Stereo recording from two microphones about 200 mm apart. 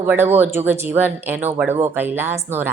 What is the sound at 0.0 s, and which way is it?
A woman's voice, 10° right (ahead or behind).